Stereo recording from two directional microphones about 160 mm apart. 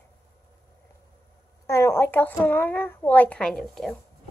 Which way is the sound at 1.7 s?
15° left (ahead or behind).